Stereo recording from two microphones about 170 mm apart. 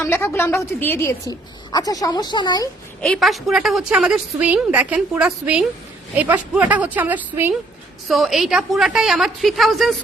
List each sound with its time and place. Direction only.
0.0 s a woman's voice: 15° left (ahead or behind)
3.0 s a woman's voice: centre (ahead or behind)
8.0 s a woman's voice: centre (ahead or behind)